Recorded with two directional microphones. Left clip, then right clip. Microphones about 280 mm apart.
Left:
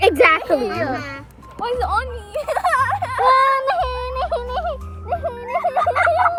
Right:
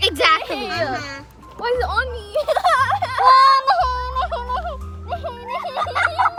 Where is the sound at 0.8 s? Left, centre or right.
Right.